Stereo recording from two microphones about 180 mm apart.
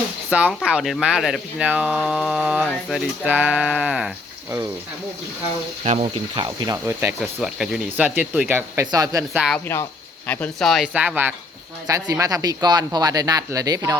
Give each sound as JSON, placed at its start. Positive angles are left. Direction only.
{"t": 0.3, "sound": "speech", "side_deg": -5}
{"t": 5.8, "sound": "speech", "side_deg": -40}
{"t": 6.3, "sound": "speech", "side_deg": -25}
{"t": 6.8, "sound": "speech", "side_deg": -10}
{"t": 9.3, "sound": "speech", "side_deg": -5}
{"t": 10.2, "sound": "speech", "side_deg": 10}